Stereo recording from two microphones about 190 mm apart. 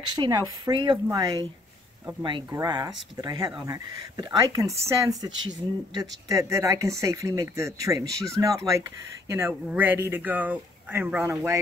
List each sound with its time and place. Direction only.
0.1 s speech: 20° right (ahead or behind)
2.5 s speech: 20° right (ahead or behind)